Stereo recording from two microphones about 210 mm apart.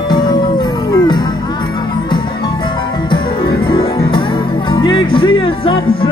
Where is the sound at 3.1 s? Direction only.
20° left (ahead or behind).